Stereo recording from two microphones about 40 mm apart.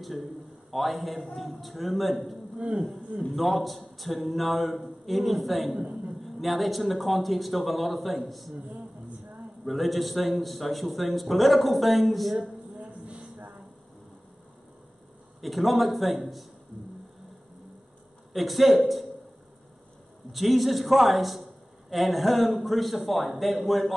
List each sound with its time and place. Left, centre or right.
0.0 s a man's voice: centre
2.5 s speech: right
3.3 s a man's voice: centre
5.8 s a sound: right
6.2 s a man's voice: centre
9.7 s a man's voice: centre
15.4 s a man's voice: centre
18.3 s a man's voice: centre
20.3 s a man's voice: centre